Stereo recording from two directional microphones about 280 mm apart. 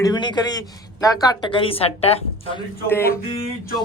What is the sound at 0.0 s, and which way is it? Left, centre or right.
Speech, centre.